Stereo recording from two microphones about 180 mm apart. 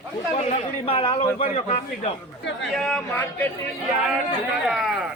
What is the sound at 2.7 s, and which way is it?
Speech, centre (ahead or behind).